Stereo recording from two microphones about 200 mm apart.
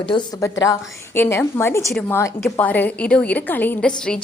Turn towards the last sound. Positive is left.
turn(degrees=5)  # may be behind; listen again after turning